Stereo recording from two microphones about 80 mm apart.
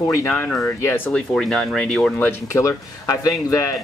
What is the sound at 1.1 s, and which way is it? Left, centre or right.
Speech, centre.